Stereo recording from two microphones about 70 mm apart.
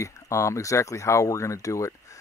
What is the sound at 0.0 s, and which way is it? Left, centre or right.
Speech, left.